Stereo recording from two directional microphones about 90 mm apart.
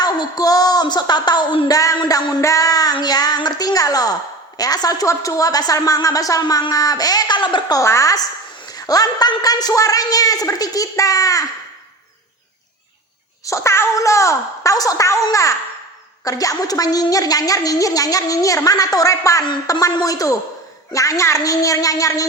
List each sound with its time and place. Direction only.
0.0 s speech: 50° left (ahead or behind)
1.6 s a woman's voice: 40° left (ahead or behind); by 7.8 s 60° left (ahead or behind)
7.8 s a woman's voice: 35° left (ahead or behind)
13.4 s a woman's voice: 35° left (ahead or behind)